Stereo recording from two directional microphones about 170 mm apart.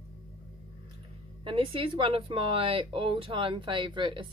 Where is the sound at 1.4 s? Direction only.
30° right (ahead or behind).